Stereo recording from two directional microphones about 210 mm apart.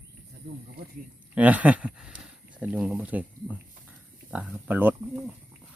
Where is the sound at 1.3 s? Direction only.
5° right (ahead or behind).